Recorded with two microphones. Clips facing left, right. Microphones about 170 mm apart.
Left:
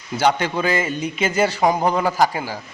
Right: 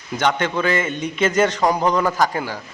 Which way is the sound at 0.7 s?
35° left (ahead or behind).